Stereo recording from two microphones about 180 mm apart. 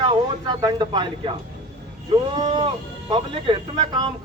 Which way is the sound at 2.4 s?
35° right (ahead or behind).